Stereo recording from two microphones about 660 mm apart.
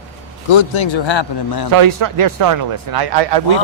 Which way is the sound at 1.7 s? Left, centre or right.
Right.